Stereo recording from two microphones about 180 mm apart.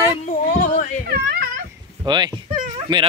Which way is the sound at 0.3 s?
45° left (ahead or behind).